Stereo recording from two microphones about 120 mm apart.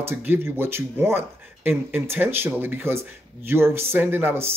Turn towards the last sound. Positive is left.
turn(degrees=-15)  # may be behind; listen again after turning